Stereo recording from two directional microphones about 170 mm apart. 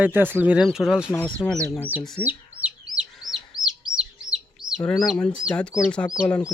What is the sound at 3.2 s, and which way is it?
Chicken, centre (ahead or behind).